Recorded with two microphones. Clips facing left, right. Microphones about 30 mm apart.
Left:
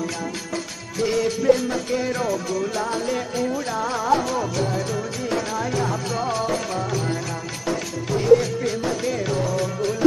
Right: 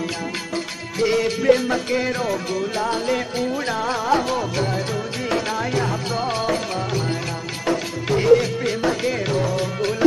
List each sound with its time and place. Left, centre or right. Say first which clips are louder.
0.9 s music: right 2 dB; right
8.1 s music: right 1 dB; right